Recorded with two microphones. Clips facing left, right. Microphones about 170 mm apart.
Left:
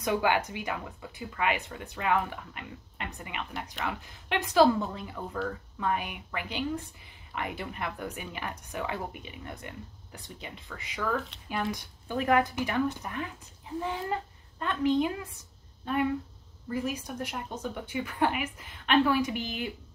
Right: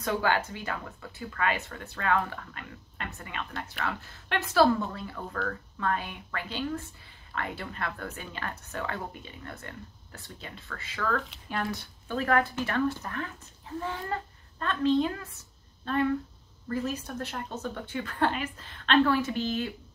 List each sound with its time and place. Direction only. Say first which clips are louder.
0.0 s speech: left 1 dB; 15° left (ahead or behind)